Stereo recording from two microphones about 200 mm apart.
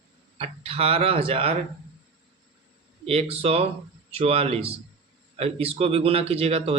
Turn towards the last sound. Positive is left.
turn(degrees=-30)  # may be behind; listen again after turning